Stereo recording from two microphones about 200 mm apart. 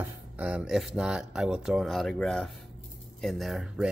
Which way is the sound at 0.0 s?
5° right (ahead or behind).